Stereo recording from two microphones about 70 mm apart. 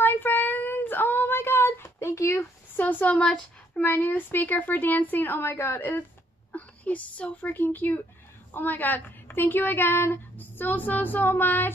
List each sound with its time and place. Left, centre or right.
0.0 s child singing: left
2.7 s speech: left
3.8 s a woman's voice: left